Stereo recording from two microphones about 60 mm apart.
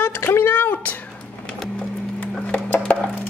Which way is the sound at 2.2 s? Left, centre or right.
Left.